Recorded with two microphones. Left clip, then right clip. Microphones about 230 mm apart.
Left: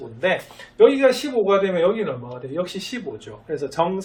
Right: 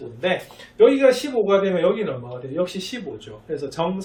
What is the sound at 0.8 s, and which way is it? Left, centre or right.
Speech, centre.